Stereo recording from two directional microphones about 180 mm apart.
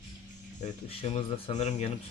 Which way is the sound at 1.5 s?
40° left (ahead or behind).